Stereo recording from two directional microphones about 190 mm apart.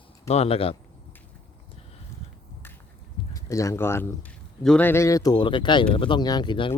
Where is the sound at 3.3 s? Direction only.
15° left (ahead or behind).